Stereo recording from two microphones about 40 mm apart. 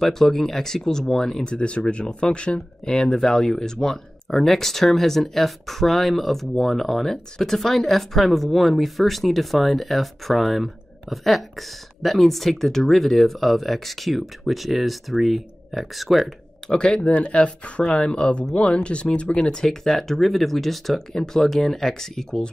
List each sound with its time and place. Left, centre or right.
0.0 s speech: centre
1.4 s speech: left; by 16.3 s centre
16.7 s speech: left
17.0 s speech: left
19.6 s speech: centre